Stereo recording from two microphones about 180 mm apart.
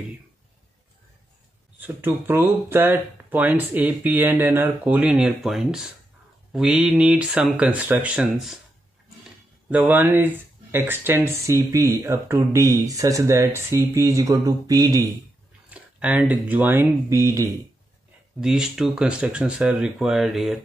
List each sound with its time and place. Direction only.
1.8 s speech: 10° right (ahead or behind)
9.7 s speech: 10° right (ahead or behind)
15.7 s speech: 10° right (ahead or behind)
18.4 s speech: 5° right (ahead or behind)